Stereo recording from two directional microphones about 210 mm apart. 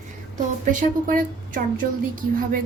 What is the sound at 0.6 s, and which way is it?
Speech, 40° right (ahead or behind).